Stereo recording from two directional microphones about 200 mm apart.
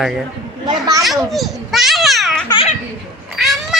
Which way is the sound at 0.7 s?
20° right (ahead or behind).